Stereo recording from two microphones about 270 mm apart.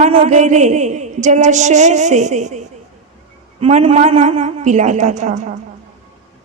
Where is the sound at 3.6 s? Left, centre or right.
Right.